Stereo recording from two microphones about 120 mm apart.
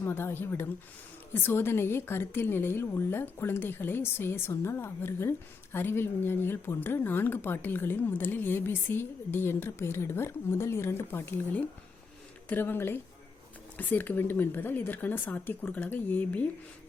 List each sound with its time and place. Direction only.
0.0 s speech: 20° left (ahead or behind)